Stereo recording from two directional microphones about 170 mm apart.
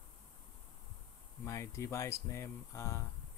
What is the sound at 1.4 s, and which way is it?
Speech, 15° left (ahead or behind).